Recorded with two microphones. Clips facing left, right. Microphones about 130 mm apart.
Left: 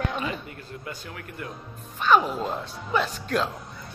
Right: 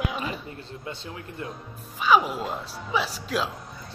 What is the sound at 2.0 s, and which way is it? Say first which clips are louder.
Speech: even; 5° right (ahead or behind).